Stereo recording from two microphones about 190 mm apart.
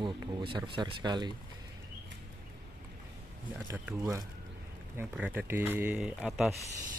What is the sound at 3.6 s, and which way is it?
Speech, 15° right (ahead or behind).